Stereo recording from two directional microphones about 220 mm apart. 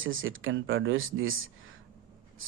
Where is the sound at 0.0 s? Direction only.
65° right (ahead or behind).